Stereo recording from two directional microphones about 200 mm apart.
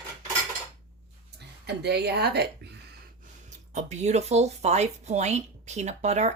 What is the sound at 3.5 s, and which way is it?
Speech, 35° right (ahead or behind).